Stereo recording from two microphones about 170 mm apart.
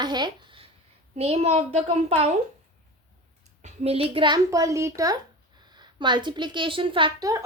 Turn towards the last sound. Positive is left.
turn(degrees=-25)  # may be behind; listen again after turning